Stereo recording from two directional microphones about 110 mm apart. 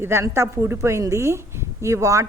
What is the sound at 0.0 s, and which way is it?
A woman's voice, 25° right (ahead or behind).